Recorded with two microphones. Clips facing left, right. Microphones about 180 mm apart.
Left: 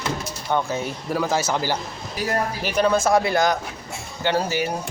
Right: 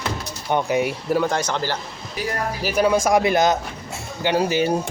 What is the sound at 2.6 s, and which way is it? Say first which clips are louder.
Speech: right 2 dB; 10° right (ahead or behind).